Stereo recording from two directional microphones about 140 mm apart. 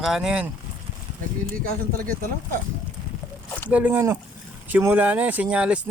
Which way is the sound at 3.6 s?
10° right (ahead or behind).